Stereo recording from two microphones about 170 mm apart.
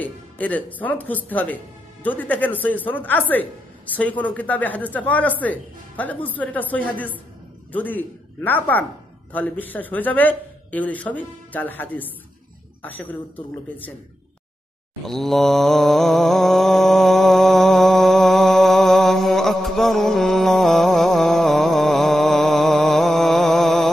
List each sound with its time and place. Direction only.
0.0 s a man's voice: 10° left (ahead or behind)
15.0 s mantra: centre (ahead or behind)